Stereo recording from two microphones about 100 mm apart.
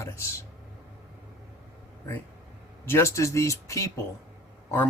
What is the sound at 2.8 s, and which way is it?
Speech, 25° left (ahead or behind).